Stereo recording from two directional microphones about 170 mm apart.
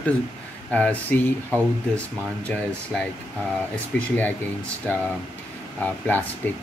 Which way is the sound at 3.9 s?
90° left.